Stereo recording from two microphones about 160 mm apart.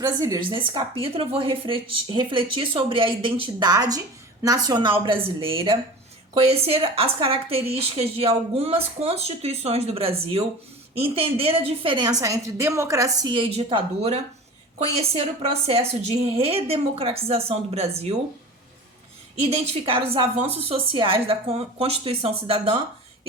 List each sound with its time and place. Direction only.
0.0 s a woman's voice: 25° right (ahead or behind)
19.4 s a woman's voice: 40° right (ahead or behind)